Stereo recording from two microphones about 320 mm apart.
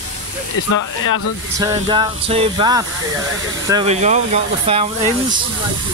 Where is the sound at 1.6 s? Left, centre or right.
Centre.